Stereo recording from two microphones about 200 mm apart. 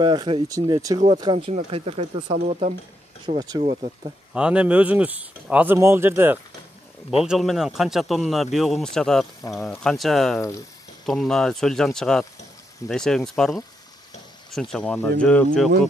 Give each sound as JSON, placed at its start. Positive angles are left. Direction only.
{"t": 0.0, "sound": "speech", "side_deg": -25}
{"t": 3.3, "sound": "speech", "side_deg": -40}
{"t": 4.3, "sound": "speech", "side_deg": -5}